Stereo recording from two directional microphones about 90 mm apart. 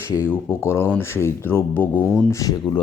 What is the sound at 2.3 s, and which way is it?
Speech, 40° left (ahead or behind).